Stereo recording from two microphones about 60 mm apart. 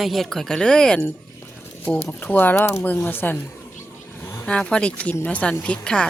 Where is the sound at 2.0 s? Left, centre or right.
Left.